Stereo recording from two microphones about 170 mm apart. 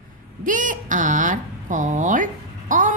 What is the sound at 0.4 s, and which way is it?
A woman's voice, 50° right (ahead or behind).